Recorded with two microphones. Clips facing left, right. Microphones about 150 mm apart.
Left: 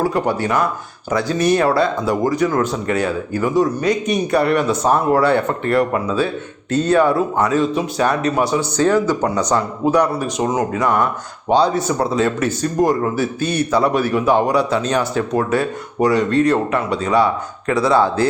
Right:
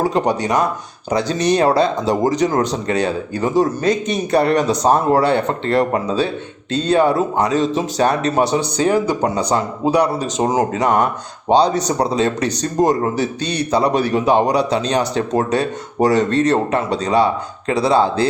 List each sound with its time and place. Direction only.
0.0 s speech: 20° right (ahead or behind)
8.5 s speech: 15° right (ahead or behind)
9.9 s speech: 15° right (ahead or behind)
10.4 s speech: 30° right (ahead or behind)
12.8 s speech: 25° right (ahead or behind)